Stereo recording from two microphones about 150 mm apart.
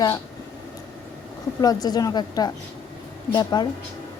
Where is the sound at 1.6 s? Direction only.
25° left (ahead or behind).